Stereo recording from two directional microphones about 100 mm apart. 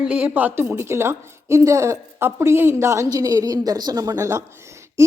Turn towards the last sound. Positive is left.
turn(degrees=-30)  # may be behind; listen again after turning